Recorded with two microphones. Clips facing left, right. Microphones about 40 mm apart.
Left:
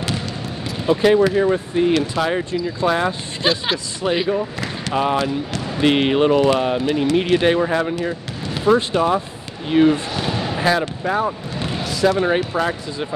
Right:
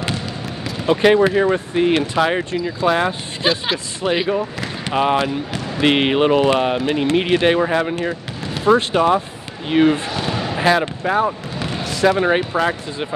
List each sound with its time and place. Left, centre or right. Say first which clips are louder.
0.8 s speech: right 1 dB; right; by 4.3 s centre
4.8 s speech: right 2 dB; right
8.9 s speech: right 2 dB; right
11.8 s basketball bounce: right 1 dB; right
12.1 s speech: right 3 dB; right